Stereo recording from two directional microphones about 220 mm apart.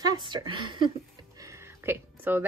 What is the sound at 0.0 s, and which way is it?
A woman's voice, 20° right (ahead or behind).